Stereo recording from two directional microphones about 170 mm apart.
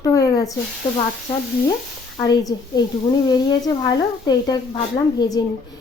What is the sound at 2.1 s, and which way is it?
Speech, 20° left (ahead or behind).